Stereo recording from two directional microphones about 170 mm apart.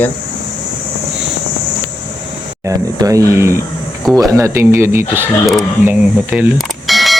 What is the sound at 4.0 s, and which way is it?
Speech, centre (ahead or behind).